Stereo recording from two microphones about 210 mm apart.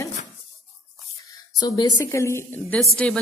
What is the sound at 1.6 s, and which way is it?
Speech, 15° left (ahead or behind).